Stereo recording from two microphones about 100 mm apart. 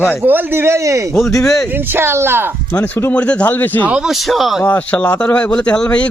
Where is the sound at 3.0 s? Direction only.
15° left (ahead or behind).